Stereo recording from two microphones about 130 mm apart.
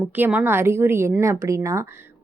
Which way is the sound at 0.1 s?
10° right (ahead or behind).